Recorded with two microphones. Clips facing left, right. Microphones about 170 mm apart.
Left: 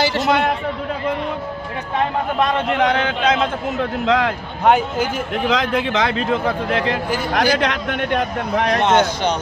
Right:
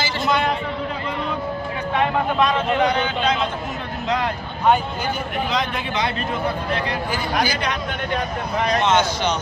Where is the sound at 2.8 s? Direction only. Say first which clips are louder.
Left 2 dB; 90° left.